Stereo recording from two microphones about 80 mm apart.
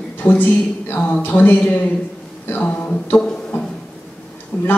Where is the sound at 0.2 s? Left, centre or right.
Left.